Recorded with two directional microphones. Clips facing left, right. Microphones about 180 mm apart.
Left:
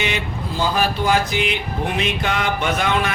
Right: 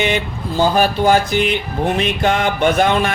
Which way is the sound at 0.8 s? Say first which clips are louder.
Right 4 dB; 30° right (ahead or behind).